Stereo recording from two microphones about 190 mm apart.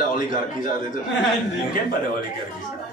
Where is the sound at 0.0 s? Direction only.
45° left (ahead or behind).